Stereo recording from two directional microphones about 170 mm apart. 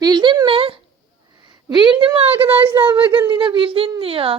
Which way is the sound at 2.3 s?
10° right (ahead or behind).